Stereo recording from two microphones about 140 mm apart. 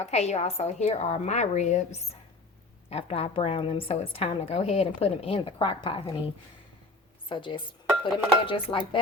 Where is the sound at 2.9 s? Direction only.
45° left (ahead or behind).